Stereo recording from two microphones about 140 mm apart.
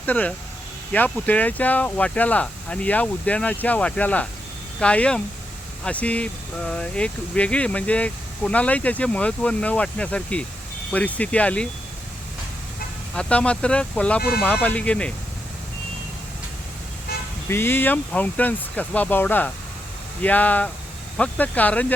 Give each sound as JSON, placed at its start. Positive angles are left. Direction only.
{"t": 0.0, "sound": "speech", "side_deg": 10}
{"t": 13.1, "sound": "speech", "side_deg": 5}
{"t": 14.2, "sound": "speech", "side_deg": 90}
{"t": 14.6, "sound": "speech", "side_deg": 10}
{"t": 17.5, "sound": "speech", "side_deg": 15}